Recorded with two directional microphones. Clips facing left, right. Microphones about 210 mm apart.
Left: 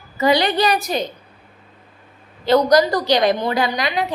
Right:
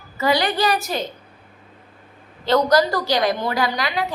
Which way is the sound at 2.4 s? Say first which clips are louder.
Left 3 dB; 10° left (ahead or behind).